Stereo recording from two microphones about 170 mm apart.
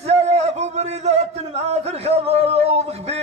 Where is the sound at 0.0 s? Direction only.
40° right (ahead or behind).